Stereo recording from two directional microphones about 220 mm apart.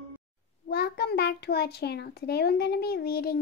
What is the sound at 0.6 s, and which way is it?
A child's voice, 45° left (ahead or behind).